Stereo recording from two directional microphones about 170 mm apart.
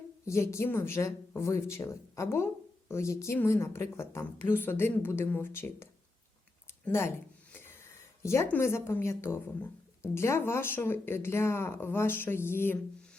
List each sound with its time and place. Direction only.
0.3 s speech: 15° left (ahead or behind)